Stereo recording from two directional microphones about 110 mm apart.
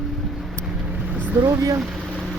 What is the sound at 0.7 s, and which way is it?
Vehicle, 10° right (ahead or behind).